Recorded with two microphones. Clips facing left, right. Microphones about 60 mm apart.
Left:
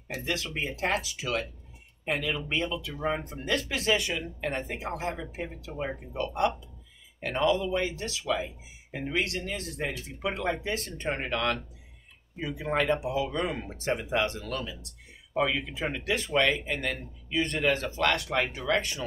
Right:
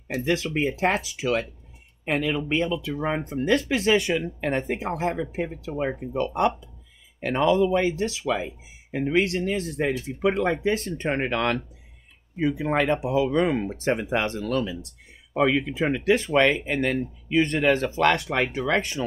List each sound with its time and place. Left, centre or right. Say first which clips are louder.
0.1 s speech: right 8 dB; right
9.8 s speech: right 8 dB; right